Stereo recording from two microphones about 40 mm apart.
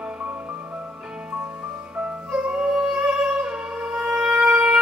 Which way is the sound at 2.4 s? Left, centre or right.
Right.